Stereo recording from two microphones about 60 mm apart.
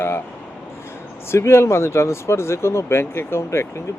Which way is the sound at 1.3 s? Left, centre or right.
Left.